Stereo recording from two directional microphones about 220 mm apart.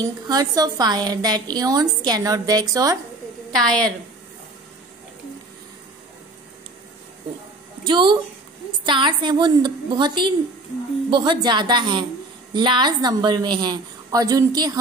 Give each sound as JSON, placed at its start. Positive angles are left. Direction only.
{"t": 0.0, "sound": "a woman's voice", "side_deg": -15}
{"t": 3.6, "sound": "a woman's voice", "side_deg": 5}
{"t": 7.8, "sound": "a woman's voice", "side_deg": -20}